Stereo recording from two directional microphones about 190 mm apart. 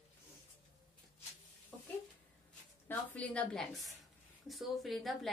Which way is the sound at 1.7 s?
Centre (ahead or behind).